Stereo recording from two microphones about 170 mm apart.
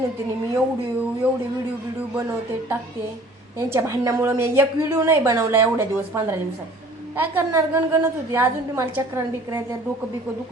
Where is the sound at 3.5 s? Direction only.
20° right (ahead or behind).